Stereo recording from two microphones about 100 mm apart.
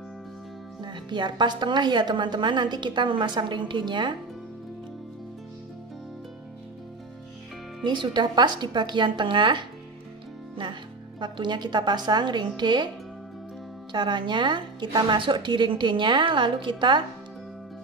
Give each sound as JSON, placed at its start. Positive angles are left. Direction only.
{"t": 0.8, "sound": "a woman's voice", "side_deg": -50}
{"t": 7.8, "sound": "a woman's voice", "side_deg": -50}
{"t": 13.9, "sound": "a woman's voice", "side_deg": -50}